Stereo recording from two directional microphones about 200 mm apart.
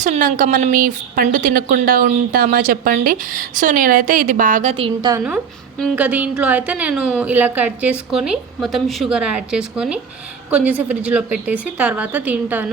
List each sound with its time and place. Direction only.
0.0 s a woman's voice: 40° right (ahead or behind)
5.1 s a woman's voice: 15° right (ahead or behind)